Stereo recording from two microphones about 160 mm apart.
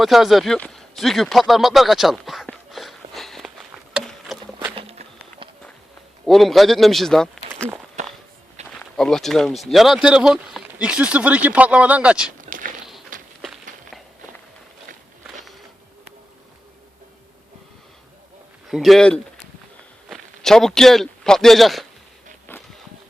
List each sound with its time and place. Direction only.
0.0 s a sound: centre (ahead or behind)
4.6 s a sound: 35° right (ahead or behind)
6.2 s speech: centre (ahead or behind)
8.0 s walk: 45° right (ahead or behind)
8.7 s speech: 5° left (ahead or behind)
12.4 s walk: 55° right (ahead or behind)
13.4 s walk: centre (ahead or behind)
18.7 s a man's voice: centre (ahead or behind)
22.5 s a sound: 15° left (ahead or behind)